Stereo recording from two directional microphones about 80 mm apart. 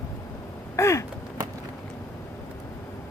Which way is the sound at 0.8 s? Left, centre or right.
Left.